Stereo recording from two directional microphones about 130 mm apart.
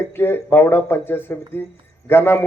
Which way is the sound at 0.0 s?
20° left (ahead or behind).